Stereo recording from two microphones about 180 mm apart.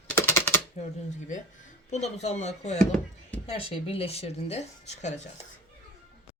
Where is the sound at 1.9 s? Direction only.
40° left (ahead or behind).